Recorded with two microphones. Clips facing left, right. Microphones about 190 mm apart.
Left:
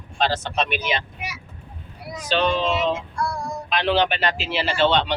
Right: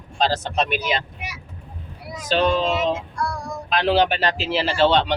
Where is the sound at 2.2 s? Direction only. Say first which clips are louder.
Right 2 dB; 45° right (ahead or behind).